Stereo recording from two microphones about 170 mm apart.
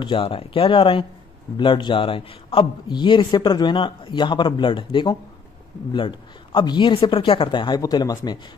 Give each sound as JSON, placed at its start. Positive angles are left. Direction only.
{"t": 0.0, "sound": "a man's voice", "side_deg": 30}